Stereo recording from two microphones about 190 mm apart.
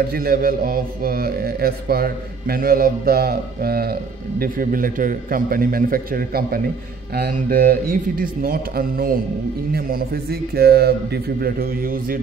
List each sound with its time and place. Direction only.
0.1 s a man's voice: 50° right (ahead or behind)